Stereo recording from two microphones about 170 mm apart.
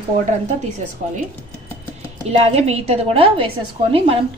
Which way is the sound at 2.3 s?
40° right (ahead or behind).